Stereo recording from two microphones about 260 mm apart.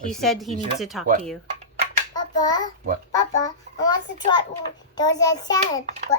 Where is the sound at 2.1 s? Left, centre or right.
Centre.